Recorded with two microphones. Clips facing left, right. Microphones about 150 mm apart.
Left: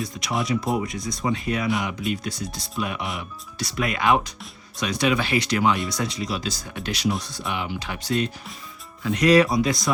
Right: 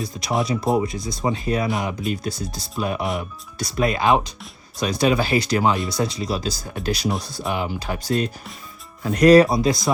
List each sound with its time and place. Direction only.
0.0 s speech: 35° right (ahead or behind)
7.1 s speech: 5° right (ahead or behind)
7.5 s speech: 40° right (ahead or behind)